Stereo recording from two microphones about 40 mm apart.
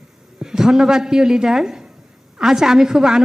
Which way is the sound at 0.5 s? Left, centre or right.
Centre.